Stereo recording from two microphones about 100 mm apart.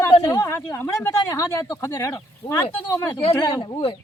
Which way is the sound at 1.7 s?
35° left (ahead or behind).